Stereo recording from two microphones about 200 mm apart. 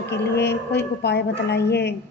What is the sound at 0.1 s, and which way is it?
A woman's voice, 55° left (ahead or behind).